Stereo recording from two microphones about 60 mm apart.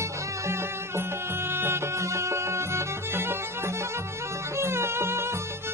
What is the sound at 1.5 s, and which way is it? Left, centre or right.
Music, right.